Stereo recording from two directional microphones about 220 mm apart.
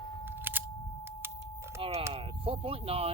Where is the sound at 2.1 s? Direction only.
25° right (ahead or behind).